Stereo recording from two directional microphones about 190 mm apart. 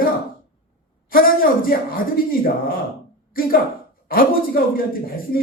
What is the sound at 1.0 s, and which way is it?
Speech, 50° left (ahead or behind).